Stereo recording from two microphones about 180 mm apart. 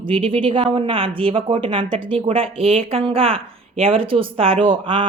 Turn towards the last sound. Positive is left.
turn(degrees=-30)  # may be behind; listen again after turning